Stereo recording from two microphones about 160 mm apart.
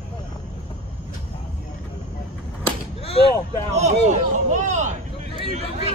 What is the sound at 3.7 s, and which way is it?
Speech, 45° right (ahead or behind).